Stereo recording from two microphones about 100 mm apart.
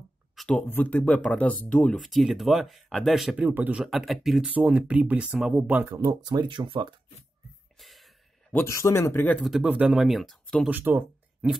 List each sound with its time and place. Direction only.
0.5 s speech: 15° left (ahead or behind)
2.0 s speech: centre (ahead or behind)
3.3 s speech: 20° right (ahead or behind); by 4.5 s centre (ahead or behind)
4.5 s speech: 15° right (ahead or behind)
5.7 s speech: 20° right (ahead or behind)
5.9 s speech: 35° right (ahead or behind)
7.8 s music: centre (ahead or behind)
8.6 s speech: 30° left (ahead or behind)
9.4 s speech: 5° right (ahead or behind)
10.7 s speech: 20° right (ahead or behind)